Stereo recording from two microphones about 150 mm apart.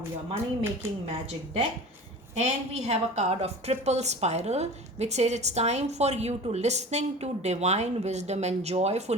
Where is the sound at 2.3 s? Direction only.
45° right (ahead or behind).